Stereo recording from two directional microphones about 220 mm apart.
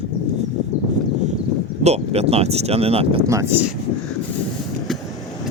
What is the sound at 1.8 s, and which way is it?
Speech, 30° right (ahead or behind).